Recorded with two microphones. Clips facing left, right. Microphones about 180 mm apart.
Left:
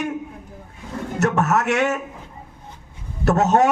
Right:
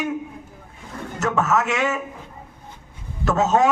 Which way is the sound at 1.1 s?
65° left (ahead or behind).